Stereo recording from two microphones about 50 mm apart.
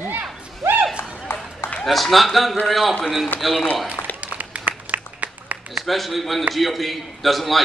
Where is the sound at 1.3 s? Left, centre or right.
Left.